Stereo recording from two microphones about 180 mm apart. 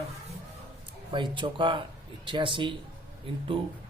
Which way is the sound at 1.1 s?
25° right (ahead or behind).